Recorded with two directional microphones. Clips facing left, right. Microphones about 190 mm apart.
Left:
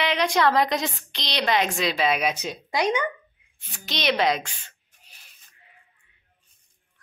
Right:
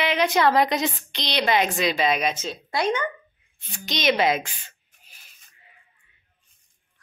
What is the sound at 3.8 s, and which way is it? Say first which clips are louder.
Speech: right 2 dB; centre (ahead or behind).